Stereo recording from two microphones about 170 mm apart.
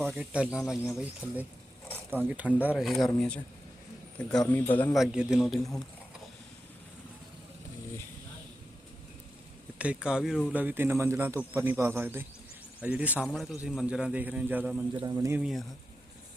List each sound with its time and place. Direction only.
0.2 s speech: 5° right (ahead or behind)
9.7 s speech: 5° right (ahead or behind)
14.9 s speech: 20° right (ahead or behind)
15.4 s speech: 5° right (ahead or behind)